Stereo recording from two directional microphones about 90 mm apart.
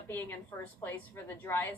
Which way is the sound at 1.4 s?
25° left (ahead or behind).